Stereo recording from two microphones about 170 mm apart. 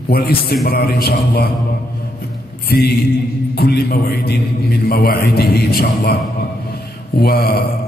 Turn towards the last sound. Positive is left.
turn(degrees=65)  # may be behind; listen again after turning